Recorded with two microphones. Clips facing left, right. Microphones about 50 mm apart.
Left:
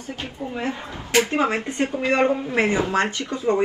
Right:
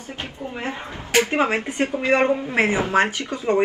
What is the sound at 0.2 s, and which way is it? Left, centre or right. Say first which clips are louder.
Speech: left 1 dB; right.